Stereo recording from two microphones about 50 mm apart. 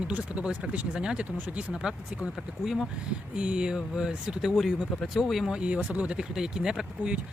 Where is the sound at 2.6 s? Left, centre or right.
Centre.